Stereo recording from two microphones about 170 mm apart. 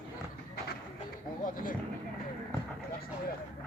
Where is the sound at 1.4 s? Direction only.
55° left (ahead or behind).